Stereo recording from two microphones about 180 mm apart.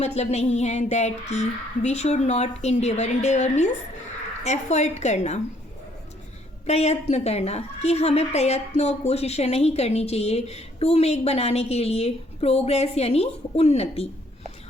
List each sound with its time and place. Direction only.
0.0 s a woman's voice: 35° left (ahead or behind)
6.7 s a woman's voice: 35° left (ahead or behind)